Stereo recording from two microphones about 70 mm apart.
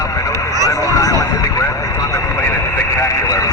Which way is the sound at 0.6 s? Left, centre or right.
Left.